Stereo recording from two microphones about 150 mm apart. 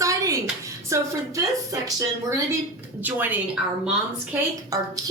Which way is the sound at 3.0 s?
10° right (ahead or behind).